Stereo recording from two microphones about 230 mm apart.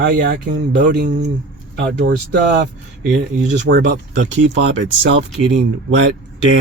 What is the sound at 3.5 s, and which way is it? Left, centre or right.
Speech, right.